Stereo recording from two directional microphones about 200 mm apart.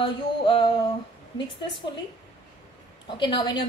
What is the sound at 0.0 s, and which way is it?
Speech, 25° left (ahead or behind).